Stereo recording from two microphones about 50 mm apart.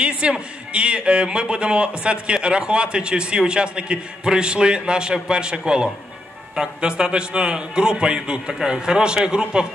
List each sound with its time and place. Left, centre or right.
0.0 s a man's voice: right